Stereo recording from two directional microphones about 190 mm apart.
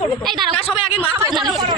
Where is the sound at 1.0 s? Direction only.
15° right (ahead or behind).